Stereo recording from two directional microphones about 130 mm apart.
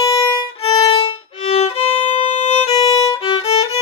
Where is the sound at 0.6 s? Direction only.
40° left (ahead or behind); by 2.9 s 55° left (ahead or behind).